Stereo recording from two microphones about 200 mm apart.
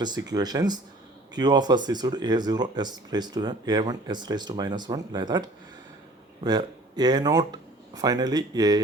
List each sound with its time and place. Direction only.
0.3 s speech: 20° right (ahead or behind)